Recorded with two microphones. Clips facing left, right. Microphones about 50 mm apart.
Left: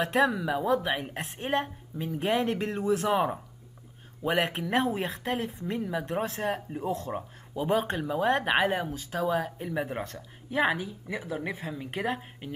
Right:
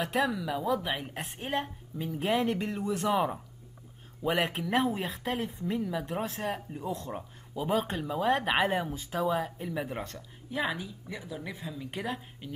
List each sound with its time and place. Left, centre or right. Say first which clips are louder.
0.2 s speech: left 5 dB; left
1.1 s speech: left 4 dB; centre
5.8 s speech: left 2 dB; centre
6.0 s speech: left 3 dB; centre
8.0 s speech: left 2 dB; centre
9.7 s speech: left 3 dB; centre
10.6 s speech: left 6 dB; left
11.9 s speech: left 5 dB; centre